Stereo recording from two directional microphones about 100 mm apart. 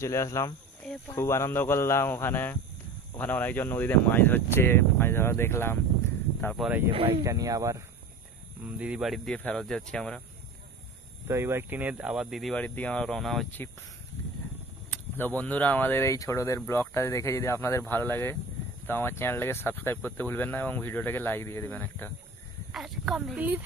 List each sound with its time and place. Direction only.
0.0 s speech: 30° left (ahead or behind)
6.6 s speech: centre (ahead or behind)
7.1 s speech: 35° right (ahead or behind)
8.7 s speech: 15° right (ahead or behind)
9.0 s speech: centre (ahead or behind)
11.2 s speech: 25° right (ahead or behind); by 12.5 s centre (ahead or behind)
12.5 s speech: 15° left (ahead or behind)
14.9 s speech: 20° left (ahead or behind)
21.6 s speech: 20° left (ahead or behind)
22.7 s speech: 5° right (ahead or behind)
23.3 s speech: 15° right (ahead or behind)